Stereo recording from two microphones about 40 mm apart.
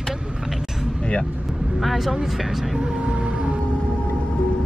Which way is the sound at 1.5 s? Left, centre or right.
Right.